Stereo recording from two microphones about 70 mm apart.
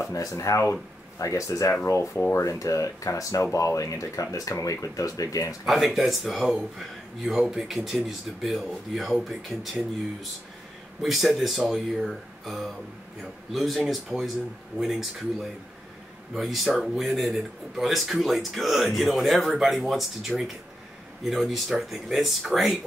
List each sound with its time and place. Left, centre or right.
0.0 s speech: left
5.7 s speech: centre
11.0 s speech: centre